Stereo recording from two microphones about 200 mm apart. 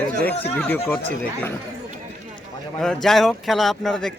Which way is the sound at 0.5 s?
10° left (ahead or behind).